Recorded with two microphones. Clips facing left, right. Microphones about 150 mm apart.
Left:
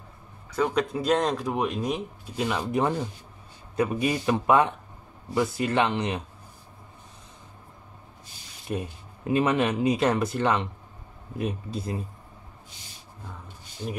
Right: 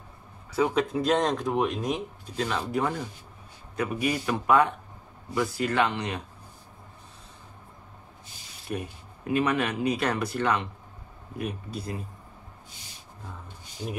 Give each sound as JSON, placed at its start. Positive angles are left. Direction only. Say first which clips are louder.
{"t": 0.6, "sound": "speech", "louder": "right 1 dB", "side_deg": -5}
{"t": 2.3, "sound": "speech", "louder": "left 2 dB", "side_deg": 15}
{"t": 3.7, "sound": "speech", "louder": "left 3 dB", "side_deg": 30}
{"t": 8.7, "sound": "speech", "louder": "left 2 dB", "side_deg": 20}